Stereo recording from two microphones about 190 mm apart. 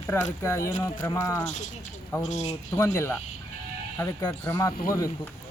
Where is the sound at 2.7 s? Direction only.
15° left (ahead or behind).